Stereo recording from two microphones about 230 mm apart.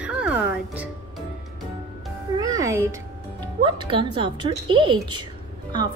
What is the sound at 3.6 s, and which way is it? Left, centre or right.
Speech, right.